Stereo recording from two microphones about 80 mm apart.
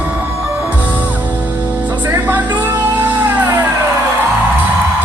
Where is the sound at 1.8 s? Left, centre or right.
Right.